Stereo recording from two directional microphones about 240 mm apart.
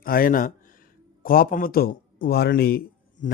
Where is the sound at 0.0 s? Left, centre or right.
Left.